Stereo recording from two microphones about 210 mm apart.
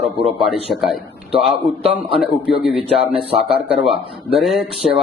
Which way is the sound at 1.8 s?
30° right (ahead or behind).